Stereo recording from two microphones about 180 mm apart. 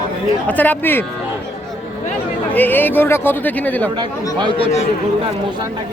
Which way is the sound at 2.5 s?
10° left (ahead or behind).